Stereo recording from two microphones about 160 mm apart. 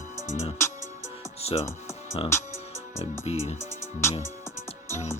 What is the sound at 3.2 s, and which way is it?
Speech, 40° left (ahead or behind).